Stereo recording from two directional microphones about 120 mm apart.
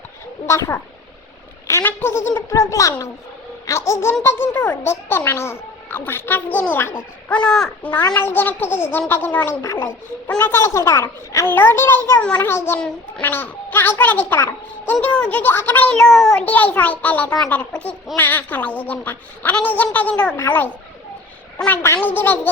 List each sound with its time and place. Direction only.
0.4 s a child's voice: 25° left (ahead or behind)
1.6 s a sound: 20° left (ahead or behind)
1.9 s a child's voice: 20° left (ahead or behind)
21.8 s a woman's voice: 20° left (ahead or behind)